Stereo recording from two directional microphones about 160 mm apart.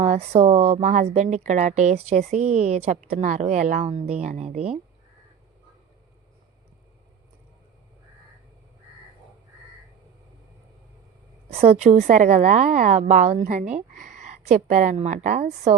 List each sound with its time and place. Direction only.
0.0 s speech: 40° right (ahead or behind)
11.4 s a woman's voice: 40° right (ahead or behind)